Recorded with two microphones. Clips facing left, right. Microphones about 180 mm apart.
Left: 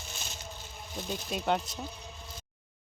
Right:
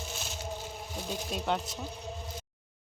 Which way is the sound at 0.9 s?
10° right (ahead or behind).